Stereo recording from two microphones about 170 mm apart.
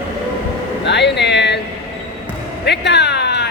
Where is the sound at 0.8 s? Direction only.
90° left.